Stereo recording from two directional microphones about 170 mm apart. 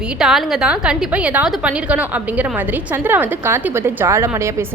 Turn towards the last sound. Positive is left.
turn(degrees=-15)  # may be behind; listen again after turning